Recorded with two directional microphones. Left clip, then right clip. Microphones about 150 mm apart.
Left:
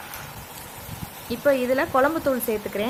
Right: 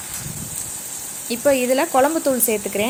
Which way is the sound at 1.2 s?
15° right (ahead or behind).